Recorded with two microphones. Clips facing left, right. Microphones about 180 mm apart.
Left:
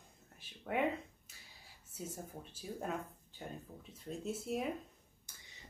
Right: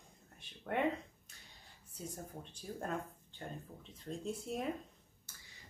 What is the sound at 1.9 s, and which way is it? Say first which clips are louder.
Speech: left 1 dB; 5° left (ahead or behind).